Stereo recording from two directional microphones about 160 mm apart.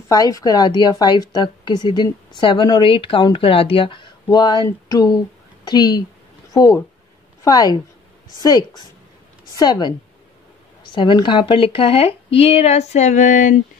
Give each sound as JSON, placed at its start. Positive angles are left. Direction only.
{"t": 0.1, "sound": "a woman's voice", "side_deg": 20}